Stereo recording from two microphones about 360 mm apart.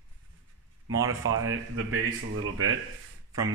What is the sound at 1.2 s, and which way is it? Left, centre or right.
Speech, right.